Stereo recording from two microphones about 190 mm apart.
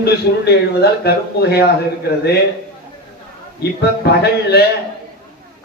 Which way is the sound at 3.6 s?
60° left (ahead or behind).